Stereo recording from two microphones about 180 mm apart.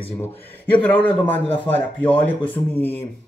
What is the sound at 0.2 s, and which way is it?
A man's voice, 10° left (ahead or behind).